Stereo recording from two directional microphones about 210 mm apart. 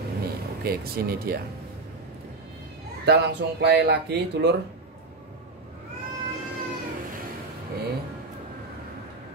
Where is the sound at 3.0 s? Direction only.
55° right (ahead or behind).